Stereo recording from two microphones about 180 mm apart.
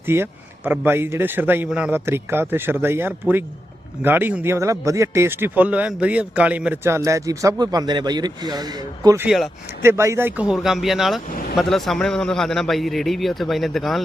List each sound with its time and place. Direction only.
0.1 s speech: 10° right (ahead or behind)
9.2 s a man's voice: centre (ahead or behind)
9.8 s a man's voice: 15° right (ahead or behind)
11.3 s speech: 50° left (ahead or behind)
11.5 s a man's voice: centre (ahead or behind)